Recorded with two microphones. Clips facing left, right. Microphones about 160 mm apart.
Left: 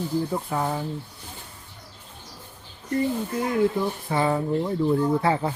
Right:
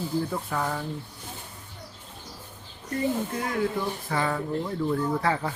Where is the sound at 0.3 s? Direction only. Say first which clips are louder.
Left 3 dB; 20° left (ahead or behind).